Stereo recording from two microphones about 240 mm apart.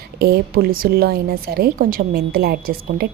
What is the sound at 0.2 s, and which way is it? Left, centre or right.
A woman's voice, right.